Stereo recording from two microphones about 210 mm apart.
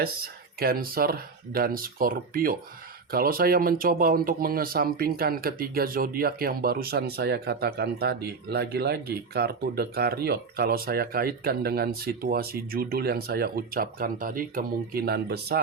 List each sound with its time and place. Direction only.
0.6 s speech: 45° right (ahead or behind)